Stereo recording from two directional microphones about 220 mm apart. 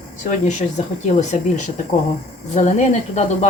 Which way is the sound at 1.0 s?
30° left (ahead or behind).